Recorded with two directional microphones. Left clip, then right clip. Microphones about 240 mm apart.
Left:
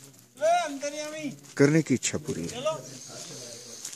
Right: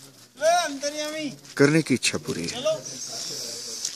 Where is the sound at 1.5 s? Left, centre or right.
Centre.